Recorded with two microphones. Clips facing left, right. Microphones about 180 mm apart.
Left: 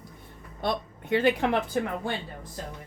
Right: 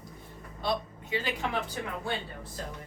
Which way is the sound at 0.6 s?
55° left (ahead or behind).